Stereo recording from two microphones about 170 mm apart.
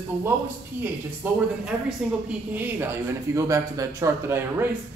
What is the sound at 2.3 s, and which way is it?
A man's voice, 10° right (ahead or behind).